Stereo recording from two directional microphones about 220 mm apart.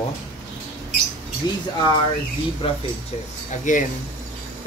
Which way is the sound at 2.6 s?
25° left (ahead or behind).